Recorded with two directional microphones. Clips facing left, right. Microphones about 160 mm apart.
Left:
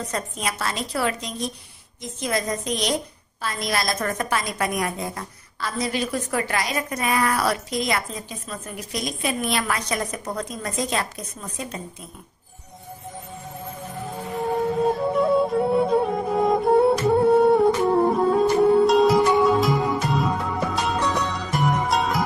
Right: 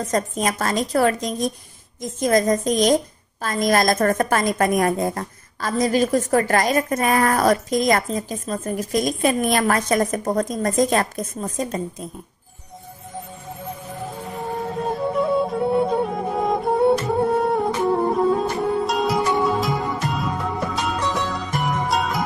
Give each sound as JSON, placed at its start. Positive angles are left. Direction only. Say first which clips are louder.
{"t": 0.0, "sound": "a woman's voice", "louder": "right 6 dB", "side_deg": -45}
{"t": 15.1, "sound": "music", "louder": "even", "side_deg": 0}